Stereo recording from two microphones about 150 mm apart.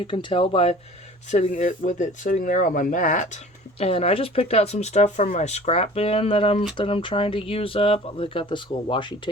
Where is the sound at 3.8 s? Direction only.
40° left (ahead or behind).